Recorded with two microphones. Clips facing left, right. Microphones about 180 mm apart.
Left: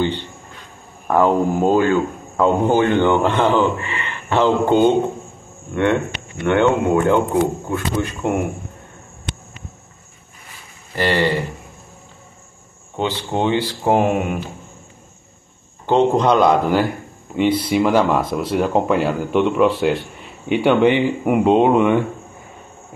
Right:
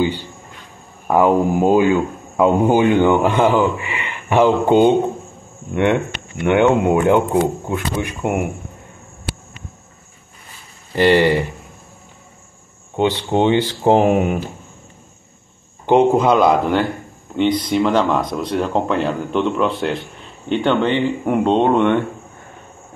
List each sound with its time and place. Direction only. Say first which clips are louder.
1.0 s speech: right 1 dB; 10° right (ahead or behind)
6.4 s speech: right 2 dB; 15° right (ahead or behind)
11.0 s speech: right 5 dB; 15° right (ahead or behind)
12.9 s speech: right 5 dB; 15° right (ahead or behind)
15.9 s a man's voice: right 2 dB; 10° right (ahead or behind)